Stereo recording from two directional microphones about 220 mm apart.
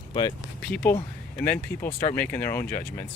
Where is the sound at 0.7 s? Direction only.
5° left (ahead or behind).